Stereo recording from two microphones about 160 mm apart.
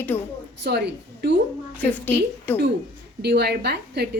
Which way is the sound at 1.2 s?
90° right.